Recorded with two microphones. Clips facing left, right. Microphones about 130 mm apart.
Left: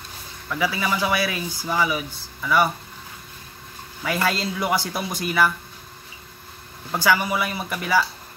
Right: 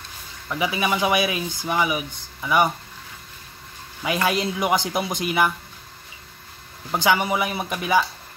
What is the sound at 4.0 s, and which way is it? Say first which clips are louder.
Speech: right 1 dB; 15° right (ahead or behind).